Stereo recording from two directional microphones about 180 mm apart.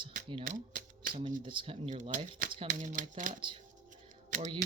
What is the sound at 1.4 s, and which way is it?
Speech, 30° right (ahead or behind).